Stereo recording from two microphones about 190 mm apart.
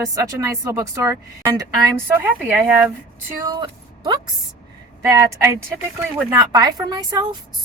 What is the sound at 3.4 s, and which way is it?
A woman's voice, 20° right (ahead or behind).